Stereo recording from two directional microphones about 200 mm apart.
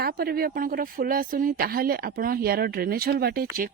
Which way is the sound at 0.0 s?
50° right (ahead or behind).